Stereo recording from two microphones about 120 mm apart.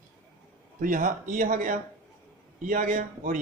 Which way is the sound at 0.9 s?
90° right.